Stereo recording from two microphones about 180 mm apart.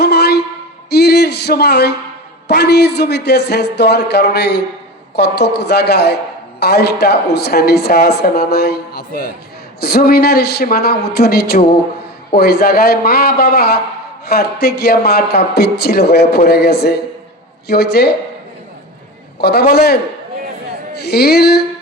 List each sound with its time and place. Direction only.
0.0 s a sound: 65° left (ahead or behind)
2.5 s speech: 65° left (ahead or behind)
19.4 s a man's voice: 65° left (ahead or behind)
21.0 s speech: 60° left (ahead or behind)